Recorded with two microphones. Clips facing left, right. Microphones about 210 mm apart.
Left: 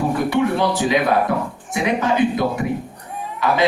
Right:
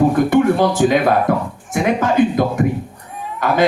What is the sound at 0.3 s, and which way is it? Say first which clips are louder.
Speech: right 5 dB; 45° right (ahead or behind).